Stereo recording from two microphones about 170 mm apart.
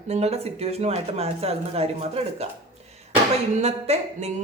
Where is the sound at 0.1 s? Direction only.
40° right (ahead or behind).